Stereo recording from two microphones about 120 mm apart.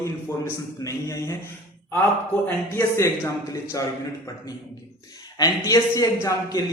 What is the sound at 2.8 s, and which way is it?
Speech, 25° left (ahead or behind).